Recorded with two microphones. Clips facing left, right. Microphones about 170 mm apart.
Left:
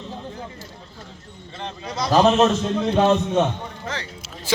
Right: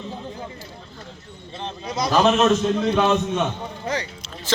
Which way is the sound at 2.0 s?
30° left (ahead or behind).